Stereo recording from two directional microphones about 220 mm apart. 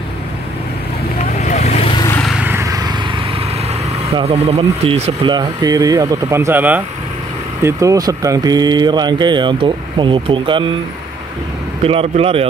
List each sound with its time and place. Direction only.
1.4 s vehicle: 30° left (ahead or behind)
2.0 s vehicle: 10° left (ahead or behind)
2.2 s vehicle: 10° right (ahead or behind)
4.1 s speech: 25° right (ahead or behind)
11.8 s speech: 25° right (ahead or behind)